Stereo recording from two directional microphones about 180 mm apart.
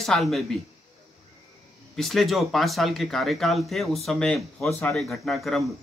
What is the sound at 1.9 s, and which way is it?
A man's voice, centre (ahead or behind).